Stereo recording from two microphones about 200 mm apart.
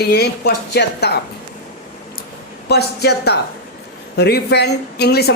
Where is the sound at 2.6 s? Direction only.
55° left (ahead or behind).